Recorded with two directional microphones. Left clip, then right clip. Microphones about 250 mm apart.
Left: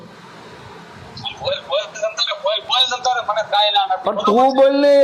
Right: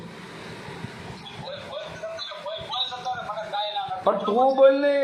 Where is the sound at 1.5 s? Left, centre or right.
Left.